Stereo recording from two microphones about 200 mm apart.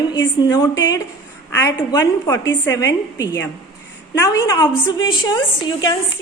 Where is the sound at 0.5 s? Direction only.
20° left (ahead or behind).